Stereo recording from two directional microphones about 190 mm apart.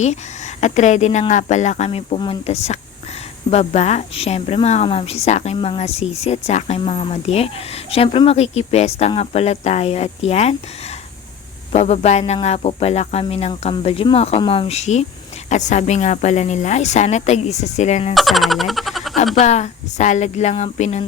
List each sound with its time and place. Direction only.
0.0 s a woman's voice: 40° left (ahead or behind)
11.7 s a woman's voice: 35° left (ahead or behind)
18.1 s a sound: centre (ahead or behind)
19.4 s a woman's voice: 35° left (ahead or behind)